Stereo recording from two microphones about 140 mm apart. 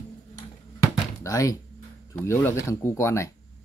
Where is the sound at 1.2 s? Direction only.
25° left (ahead or behind).